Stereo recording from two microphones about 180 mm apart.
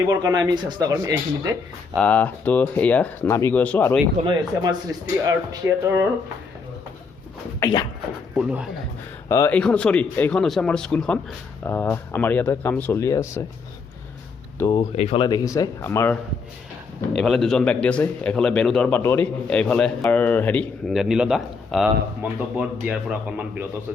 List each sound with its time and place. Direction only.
0.1 s speech: 20° right (ahead or behind)
2.0 s a man's voice: 10° left (ahead or behind)
4.2 s speech: 25° right (ahead or behind)
7.6 s speech: 20° left (ahead or behind)
8.4 s speech: 5° right (ahead or behind)
9.3 s a man's voice: 15° left (ahead or behind)
9.6 s a man's voice: 5° left (ahead or behind)
14.7 s speech: 30° left (ahead or behind); by 16.1 s 15° left (ahead or behind)
17.2 s a man's voice: centre (ahead or behind)
20.9 s speech: 5° right (ahead or behind)